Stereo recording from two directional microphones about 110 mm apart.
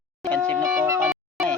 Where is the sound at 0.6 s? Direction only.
25° right (ahead or behind).